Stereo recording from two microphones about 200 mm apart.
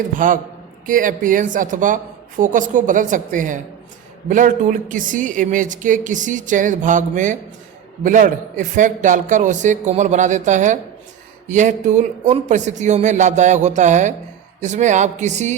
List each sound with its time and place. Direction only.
0.2 s a woman's voice: 40° right (ahead or behind)